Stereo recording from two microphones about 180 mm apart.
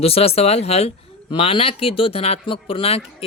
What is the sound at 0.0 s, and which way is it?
Speech, 35° left (ahead or behind).